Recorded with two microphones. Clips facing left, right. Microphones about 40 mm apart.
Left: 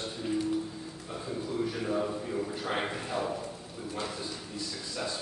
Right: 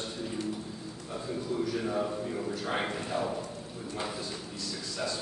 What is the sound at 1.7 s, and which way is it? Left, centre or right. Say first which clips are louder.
Speech: even; centre.